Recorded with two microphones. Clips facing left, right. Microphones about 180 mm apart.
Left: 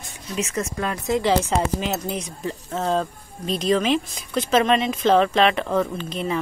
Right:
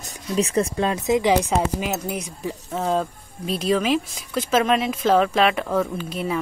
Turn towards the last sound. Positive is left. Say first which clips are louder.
# even
turn(degrees=-5)  # may be behind; listen again after turning